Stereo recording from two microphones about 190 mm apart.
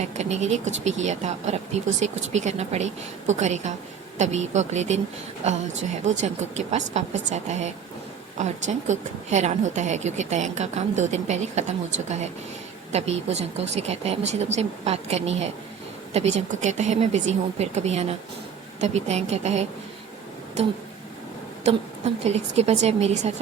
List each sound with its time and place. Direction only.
0.0 s speech: 35° right (ahead or behind)